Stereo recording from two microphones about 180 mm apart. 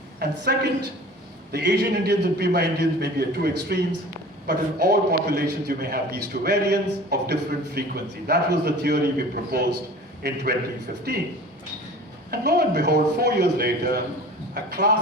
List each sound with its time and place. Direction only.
0.2 s a woman's voice: 65° right (ahead or behind)
12.3 s a man's voice: 65° right (ahead or behind)